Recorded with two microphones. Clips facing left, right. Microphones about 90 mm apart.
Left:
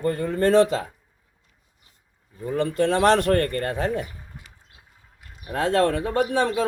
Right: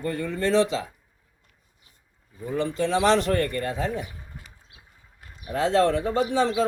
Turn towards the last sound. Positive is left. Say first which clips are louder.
# left 1 dB
turn(degrees=55)  # may be behind; listen again after turning